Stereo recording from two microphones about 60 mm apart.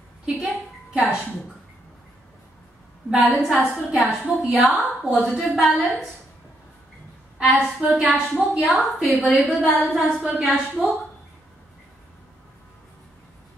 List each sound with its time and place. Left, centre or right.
0.3 s a woman's voice: centre
3.2 s a woman's voice: centre
7.3 s a woman's voice: centre
7.9 s a woman's voice: centre
10.0 s a woman's voice: centre